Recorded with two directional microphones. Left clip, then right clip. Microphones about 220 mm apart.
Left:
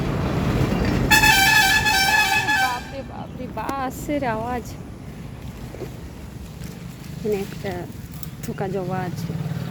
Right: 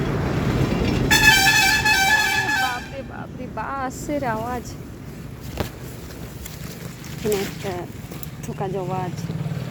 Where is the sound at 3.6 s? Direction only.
15° left (ahead or behind).